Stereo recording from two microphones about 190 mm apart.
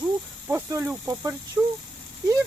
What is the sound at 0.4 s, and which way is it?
Speech, 10° right (ahead or behind).